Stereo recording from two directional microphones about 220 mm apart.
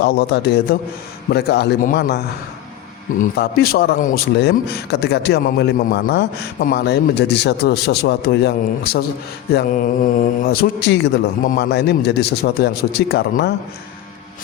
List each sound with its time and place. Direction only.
0.0 s speech: 50° left (ahead or behind)